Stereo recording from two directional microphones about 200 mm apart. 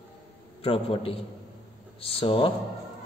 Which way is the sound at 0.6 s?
30° left (ahead or behind).